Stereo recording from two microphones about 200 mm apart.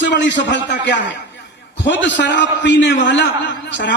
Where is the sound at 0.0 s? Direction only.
60° left (ahead or behind).